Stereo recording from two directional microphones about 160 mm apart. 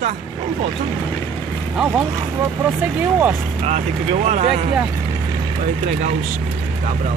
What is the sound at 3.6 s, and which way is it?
Speech, 45° right (ahead or behind).